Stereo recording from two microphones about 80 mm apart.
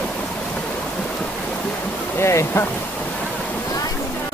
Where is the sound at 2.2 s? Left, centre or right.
Left.